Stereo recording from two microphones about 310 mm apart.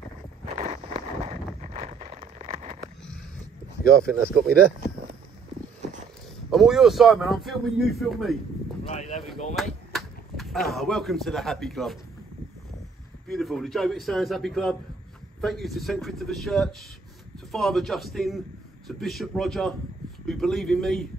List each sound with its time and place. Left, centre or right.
0.6 s a sound: right
4.2 s speech: centre
6.5 s speech: centre
8.8 s speech: centre
9.6 s a sound: centre
10.7 s speech: centre
13.3 s speech: centre